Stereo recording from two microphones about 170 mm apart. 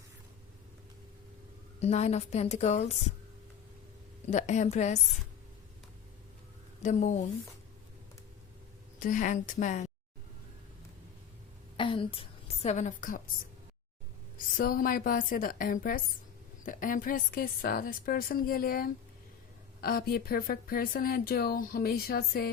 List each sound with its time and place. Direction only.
1.8 s a woman's voice: 40° left (ahead or behind)
4.3 s speech: 45° left (ahead or behind)
6.8 s speech: 45° left (ahead or behind)
9.0 s speech: 50° left (ahead or behind)
11.8 s a sound: 30° left (ahead or behind)
12.6 s speech: 45° left (ahead or behind)
14.3 s speech: 60° left (ahead or behind)